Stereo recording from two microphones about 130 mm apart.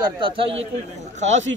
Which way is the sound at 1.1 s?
65° right (ahead or behind).